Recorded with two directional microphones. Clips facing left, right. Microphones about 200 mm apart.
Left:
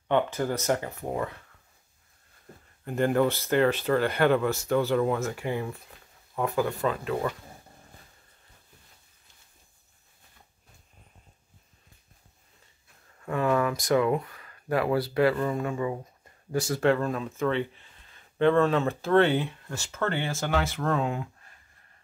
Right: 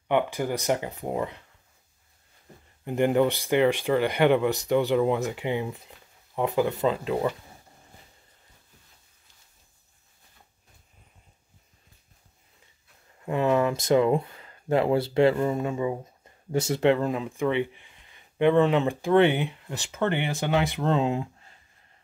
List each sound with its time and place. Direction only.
0.1 s speech: 15° right (ahead or behind)
2.8 s speech: 20° right (ahead or behind)
13.2 s speech: 20° right (ahead or behind)